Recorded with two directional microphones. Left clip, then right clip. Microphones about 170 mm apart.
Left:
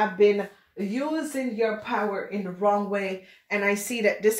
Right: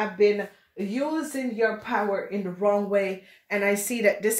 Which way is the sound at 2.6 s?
35° right (ahead or behind).